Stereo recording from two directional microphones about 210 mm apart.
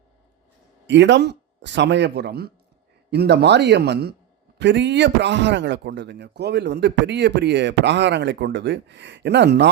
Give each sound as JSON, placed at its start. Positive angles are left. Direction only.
{"t": 0.9, "sound": "a man's voice", "side_deg": -60}